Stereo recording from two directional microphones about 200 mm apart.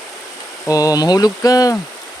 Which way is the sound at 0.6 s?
15° left (ahead or behind).